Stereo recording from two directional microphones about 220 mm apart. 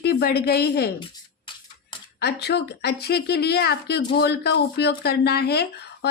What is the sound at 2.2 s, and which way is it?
Speech, 50° left (ahead or behind).